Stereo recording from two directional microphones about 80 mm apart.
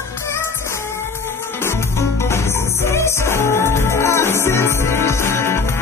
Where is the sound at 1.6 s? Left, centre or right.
Left.